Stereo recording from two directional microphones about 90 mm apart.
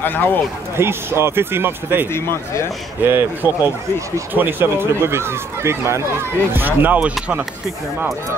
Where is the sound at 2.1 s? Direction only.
30° left (ahead or behind).